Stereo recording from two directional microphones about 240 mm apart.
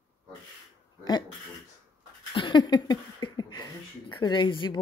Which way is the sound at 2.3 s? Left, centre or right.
Centre.